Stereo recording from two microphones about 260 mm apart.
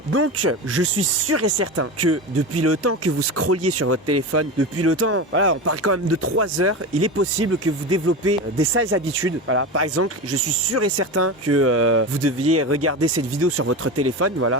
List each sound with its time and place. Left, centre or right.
0.1 s speech: right